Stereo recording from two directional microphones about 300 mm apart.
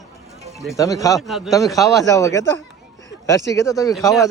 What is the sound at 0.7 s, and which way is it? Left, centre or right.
Speech, centre.